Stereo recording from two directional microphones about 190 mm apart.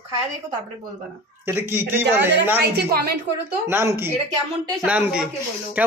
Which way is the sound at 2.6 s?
55° right (ahead or behind).